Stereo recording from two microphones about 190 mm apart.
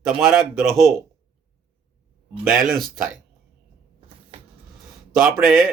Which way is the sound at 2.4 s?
5° right (ahead or behind).